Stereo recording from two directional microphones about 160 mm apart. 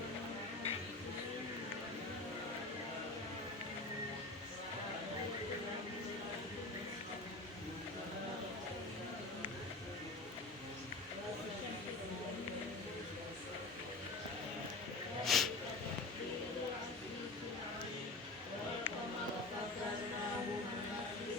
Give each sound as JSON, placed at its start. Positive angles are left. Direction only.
{"t": 15.2, "sound": "vehicle", "side_deg": 0}